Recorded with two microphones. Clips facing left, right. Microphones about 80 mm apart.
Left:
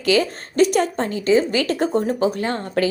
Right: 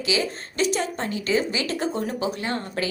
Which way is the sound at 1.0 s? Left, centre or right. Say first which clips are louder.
Left 6 dB; left.